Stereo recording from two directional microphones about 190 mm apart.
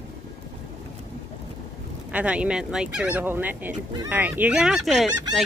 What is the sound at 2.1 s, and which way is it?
Speech, 5° right (ahead or behind).